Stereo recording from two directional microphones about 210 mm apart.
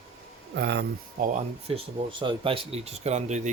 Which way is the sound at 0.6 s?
55° right (ahead or behind).